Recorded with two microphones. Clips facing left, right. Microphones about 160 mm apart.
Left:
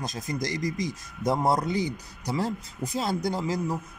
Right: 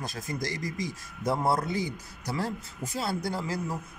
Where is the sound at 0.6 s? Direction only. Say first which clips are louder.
Left 4 dB; 40° left (ahead or behind).